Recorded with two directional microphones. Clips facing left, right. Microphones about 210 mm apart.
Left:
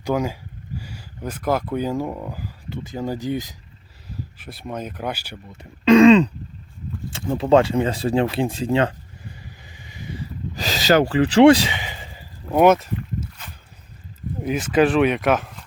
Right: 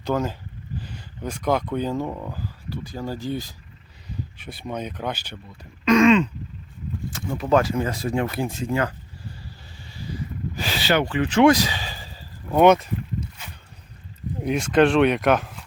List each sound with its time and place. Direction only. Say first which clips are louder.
0.0 s speech: left 2 dB; 10° left (ahead or behind)
4.4 s speech: even; centre (ahead or behind)
5.5 s speech: left 5 dB; 30° left (ahead or behind)
9.7 s a sound: right 1 dB; 15° left (ahead or behind)
10.5 s a sound: left 5 dB; 40° left (ahead or behind)
11.1 s speech: left 4 dB; 30° left (ahead or behind)
12.5 s speech: even; 5° left (ahead or behind)
14.4 s speech: even; 5° left (ahead or behind)